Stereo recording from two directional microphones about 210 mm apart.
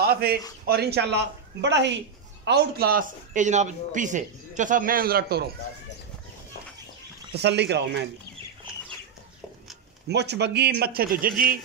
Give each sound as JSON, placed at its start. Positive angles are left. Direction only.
{"t": 0.0, "sound": "a man's voice", "side_deg": -50}
{"t": 7.3, "sound": "speech", "side_deg": -55}
{"t": 10.0, "sound": "a man's voice", "side_deg": -55}